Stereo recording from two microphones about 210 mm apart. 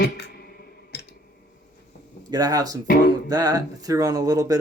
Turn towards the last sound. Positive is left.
turn(degrees=-15)  # may be behind; listen again after turning